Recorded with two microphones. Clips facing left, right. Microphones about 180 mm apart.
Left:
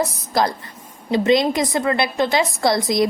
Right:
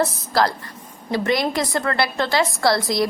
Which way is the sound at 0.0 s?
20° left (ahead or behind).